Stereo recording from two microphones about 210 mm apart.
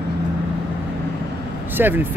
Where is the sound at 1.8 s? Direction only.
10° right (ahead or behind).